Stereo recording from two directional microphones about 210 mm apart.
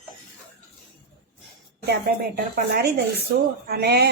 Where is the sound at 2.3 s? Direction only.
50° right (ahead or behind).